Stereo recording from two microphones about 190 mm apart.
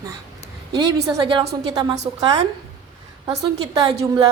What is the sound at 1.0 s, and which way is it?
A woman's voice, 20° right (ahead or behind).